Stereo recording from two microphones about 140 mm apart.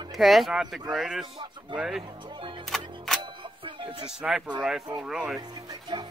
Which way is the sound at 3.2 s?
35° right (ahead or behind).